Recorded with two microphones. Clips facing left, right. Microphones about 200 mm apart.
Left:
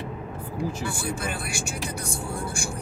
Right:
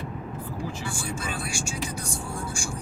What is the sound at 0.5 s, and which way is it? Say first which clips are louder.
Speech: left 6 dB; 60° left (ahead or behind).